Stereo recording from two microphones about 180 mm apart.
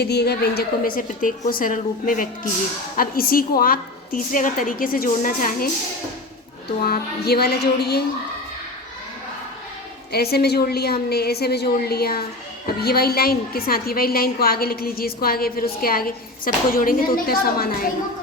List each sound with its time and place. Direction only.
0.0 s a woman's voice: 65° left (ahead or behind); by 5.6 s 50° left (ahead or behind)
6.8 s a woman's voice: 60° left (ahead or behind)
10.1 s a woman's voice: 60° left (ahead or behind)